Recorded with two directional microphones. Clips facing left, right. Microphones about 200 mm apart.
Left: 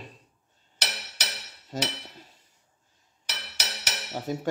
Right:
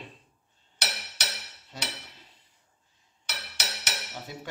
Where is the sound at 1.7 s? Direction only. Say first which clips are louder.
Left 9 dB; 45° left (ahead or behind).